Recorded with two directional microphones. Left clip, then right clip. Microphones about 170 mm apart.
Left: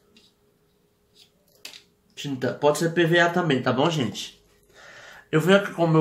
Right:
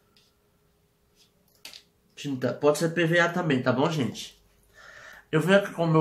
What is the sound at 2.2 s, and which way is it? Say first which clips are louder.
Speech: left 2 dB; 15° left (ahead or behind).